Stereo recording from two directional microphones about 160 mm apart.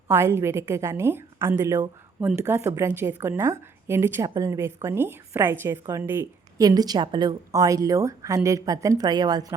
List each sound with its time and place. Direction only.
0.1 s a woman's voice: 15° right (ahead or behind)
6.6 s a woman's voice: 25° right (ahead or behind)